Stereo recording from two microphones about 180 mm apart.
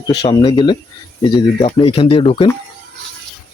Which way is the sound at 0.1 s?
25° left (ahead or behind).